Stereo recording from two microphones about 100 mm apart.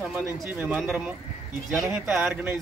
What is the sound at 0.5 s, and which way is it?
Music, 15° right (ahead or behind).